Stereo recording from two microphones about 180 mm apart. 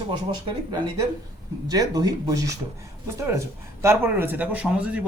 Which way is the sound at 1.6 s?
20° right (ahead or behind).